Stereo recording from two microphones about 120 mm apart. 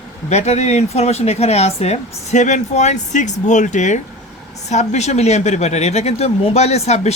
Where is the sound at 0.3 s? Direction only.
70° left (ahead or behind).